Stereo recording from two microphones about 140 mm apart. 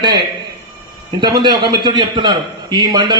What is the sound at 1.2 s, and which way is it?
A man's voice, 30° right (ahead or behind).